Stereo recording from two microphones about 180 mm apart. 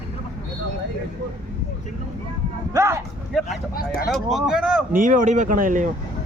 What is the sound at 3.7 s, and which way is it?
Speech, 55° left (ahead or behind).